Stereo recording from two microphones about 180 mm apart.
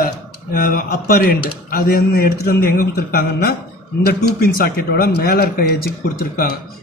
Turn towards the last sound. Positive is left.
turn(degrees=55)  # may be behind; listen again after turning